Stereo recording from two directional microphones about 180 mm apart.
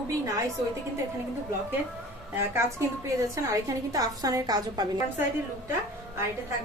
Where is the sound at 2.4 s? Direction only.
15° right (ahead or behind).